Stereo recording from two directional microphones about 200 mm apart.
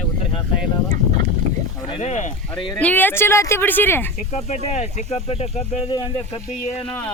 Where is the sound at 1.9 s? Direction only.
30° left (ahead or behind).